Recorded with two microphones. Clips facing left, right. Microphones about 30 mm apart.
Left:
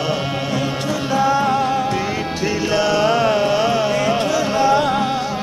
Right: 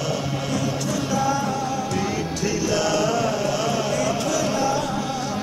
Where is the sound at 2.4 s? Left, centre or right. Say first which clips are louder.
Left 5 dB; left.